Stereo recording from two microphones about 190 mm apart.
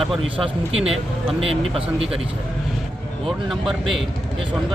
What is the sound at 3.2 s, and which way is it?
Speech, centre (ahead or behind).